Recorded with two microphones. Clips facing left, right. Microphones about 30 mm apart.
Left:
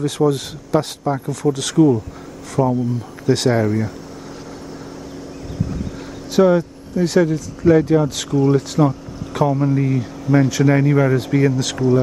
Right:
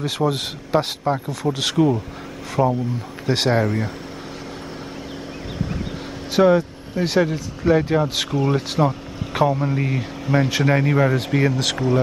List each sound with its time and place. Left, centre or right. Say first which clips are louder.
0.0 s speech: left 4 dB; right
6.3 s speech: left 1 dB; centre